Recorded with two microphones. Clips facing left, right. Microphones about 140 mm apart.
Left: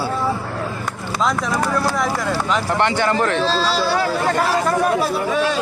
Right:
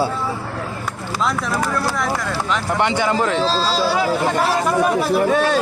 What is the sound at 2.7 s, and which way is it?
Speech, 10° right (ahead or behind).